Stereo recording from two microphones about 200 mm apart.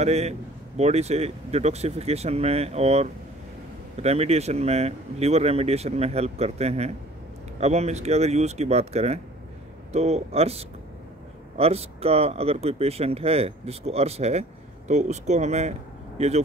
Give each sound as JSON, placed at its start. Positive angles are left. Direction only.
{"t": 0.0, "sound": "speech", "side_deg": -35}